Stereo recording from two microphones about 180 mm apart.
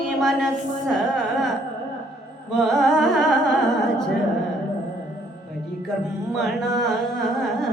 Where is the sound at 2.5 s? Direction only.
Centre (ahead or behind).